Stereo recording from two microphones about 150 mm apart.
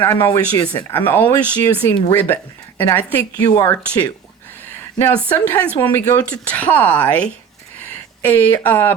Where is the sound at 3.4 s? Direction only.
25° left (ahead or behind).